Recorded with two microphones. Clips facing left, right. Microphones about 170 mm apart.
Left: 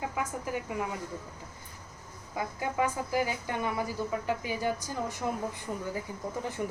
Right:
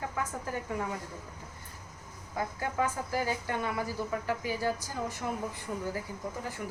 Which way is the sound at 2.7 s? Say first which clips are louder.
Left 2 dB; 15° left (ahead or behind).